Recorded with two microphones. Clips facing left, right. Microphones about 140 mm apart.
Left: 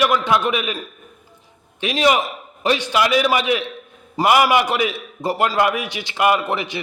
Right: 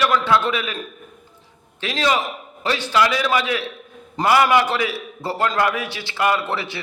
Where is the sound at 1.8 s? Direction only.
15° left (ahead or behind).